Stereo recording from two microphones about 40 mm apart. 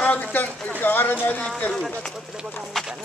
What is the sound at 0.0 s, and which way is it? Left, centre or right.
Speech, left.